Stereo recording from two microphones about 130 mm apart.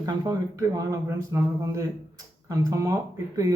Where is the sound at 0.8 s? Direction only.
25° right (ahead or behind).